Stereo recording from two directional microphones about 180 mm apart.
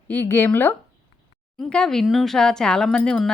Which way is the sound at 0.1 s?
10° left (ahead or behind).